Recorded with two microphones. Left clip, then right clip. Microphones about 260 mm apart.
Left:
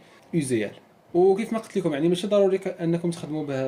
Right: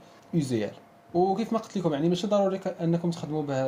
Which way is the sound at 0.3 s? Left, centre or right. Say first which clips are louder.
Left 3 dB; right.